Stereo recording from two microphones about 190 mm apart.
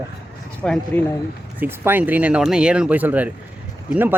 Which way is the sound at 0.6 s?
5° left (ahead or behind).